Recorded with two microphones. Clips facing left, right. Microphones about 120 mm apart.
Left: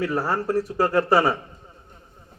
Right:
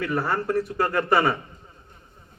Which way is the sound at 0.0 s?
10° left (ahead or behind).